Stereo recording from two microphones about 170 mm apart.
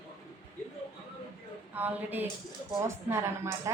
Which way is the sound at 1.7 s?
10° right (ahead or behind).